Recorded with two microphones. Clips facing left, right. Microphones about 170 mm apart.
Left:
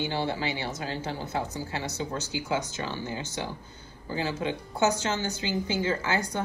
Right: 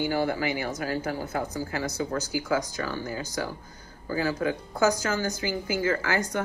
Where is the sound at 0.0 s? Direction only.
25° left (ahead or behind).